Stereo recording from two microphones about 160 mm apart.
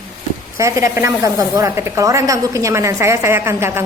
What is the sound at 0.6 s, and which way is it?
A woman's voice, 20° right (ahead or behind).